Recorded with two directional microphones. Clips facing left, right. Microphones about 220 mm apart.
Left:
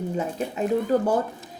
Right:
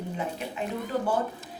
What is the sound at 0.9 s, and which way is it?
Speech, 45° left (ahead or behind).